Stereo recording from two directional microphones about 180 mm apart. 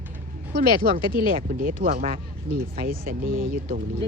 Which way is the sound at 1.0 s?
25° left (ahead or behind).